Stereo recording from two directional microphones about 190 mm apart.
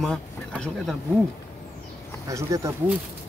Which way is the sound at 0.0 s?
5° left (ahead or behind).